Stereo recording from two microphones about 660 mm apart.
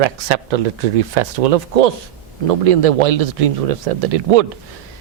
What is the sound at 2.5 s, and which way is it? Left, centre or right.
A man's voice, right.